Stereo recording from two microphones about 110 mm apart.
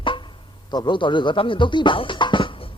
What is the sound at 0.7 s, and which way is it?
Speech, 40° left (ahead or behind).